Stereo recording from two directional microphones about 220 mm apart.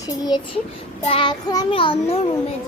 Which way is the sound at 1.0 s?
25° left (ahead or behind).